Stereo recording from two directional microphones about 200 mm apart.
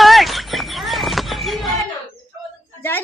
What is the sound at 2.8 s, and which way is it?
Speech, 10° left (ahead or behind).